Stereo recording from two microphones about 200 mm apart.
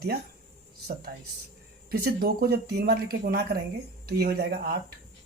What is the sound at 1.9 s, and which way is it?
Speech, 50° right (ahead or behind).